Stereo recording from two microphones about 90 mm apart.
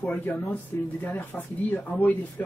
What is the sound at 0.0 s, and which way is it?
Speech, 20° left (ahead or behind).